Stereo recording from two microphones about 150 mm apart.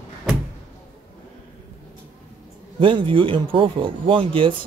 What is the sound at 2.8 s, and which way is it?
Speech, 35° right (ahead or behind).